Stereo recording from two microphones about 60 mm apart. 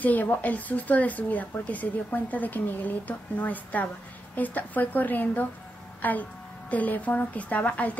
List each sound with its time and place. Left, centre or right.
0.0 s speech: left